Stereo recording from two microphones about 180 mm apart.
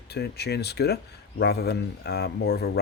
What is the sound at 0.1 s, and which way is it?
Speech, 65° left (ahead or behind).